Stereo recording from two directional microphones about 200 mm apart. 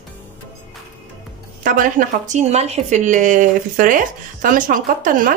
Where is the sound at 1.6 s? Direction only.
40° right (ahead or behind).